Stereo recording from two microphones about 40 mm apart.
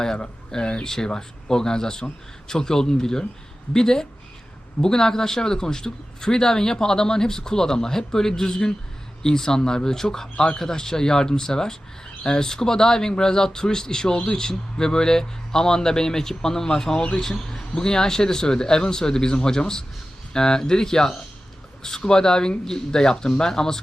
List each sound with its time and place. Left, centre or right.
0.0 s a man's voice: centre
17.2 s a man's voice: centre